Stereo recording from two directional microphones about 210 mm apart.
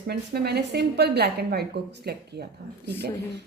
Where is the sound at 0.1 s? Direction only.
50° right (ahead or behind).